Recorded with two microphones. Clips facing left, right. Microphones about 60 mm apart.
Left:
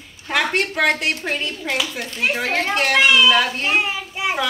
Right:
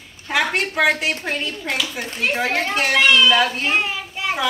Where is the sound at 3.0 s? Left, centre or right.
Centre.